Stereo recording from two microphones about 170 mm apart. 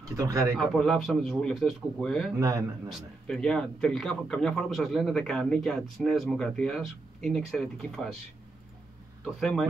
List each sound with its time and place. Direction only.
0.1 s speech: 20° right (ahead or behind)
0.6 s a man's voice: centre (ahead or behind)
2.3 s speech: 20° right (ahead or behind)
2.9 s a man's voice: 5° left (ahead or behind)
9.2 s a man's voice: centre (ahead or behind)